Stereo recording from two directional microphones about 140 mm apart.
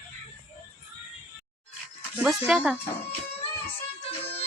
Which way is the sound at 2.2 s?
5° right (ahead or behind).